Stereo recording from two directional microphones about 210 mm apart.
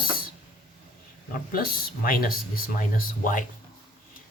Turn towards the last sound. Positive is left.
turn(degrees=40)  # may be behind; listen again after turning